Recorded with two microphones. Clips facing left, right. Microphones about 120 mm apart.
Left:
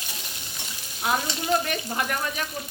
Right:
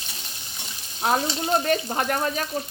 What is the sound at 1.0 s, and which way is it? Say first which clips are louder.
Frying: right 2 dB; 35° right (ahead or behind).